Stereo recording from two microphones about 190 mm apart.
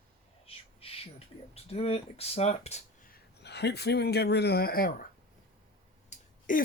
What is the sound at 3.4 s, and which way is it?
Speech, 60° left (ahead or behind).